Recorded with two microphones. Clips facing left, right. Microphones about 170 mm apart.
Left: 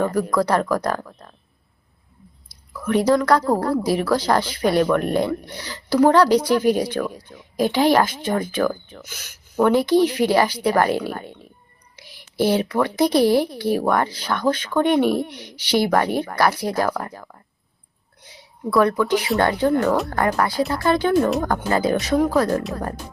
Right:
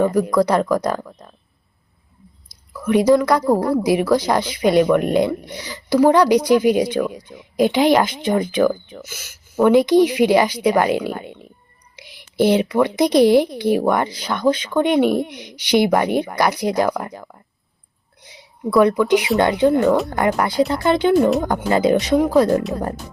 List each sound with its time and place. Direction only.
0.0 s speech: 15° right (ahead or behind)
2.8 s speech: 15° right (ahead or behind)
18.2 s a sound: 15° right (ahead or behind)
18.8 s speech: 15° right (ahead or behind)
21.2 s speech: centre (ahead or behind)
21.4 s speech: 20° right (ahead or behind)